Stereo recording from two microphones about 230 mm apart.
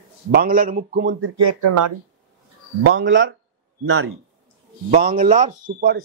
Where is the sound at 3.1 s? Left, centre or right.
Right.